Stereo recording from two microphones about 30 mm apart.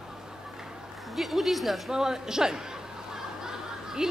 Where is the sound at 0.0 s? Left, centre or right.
Centre.